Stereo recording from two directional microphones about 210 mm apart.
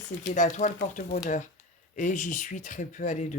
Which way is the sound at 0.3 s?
35° left (ahead or behind).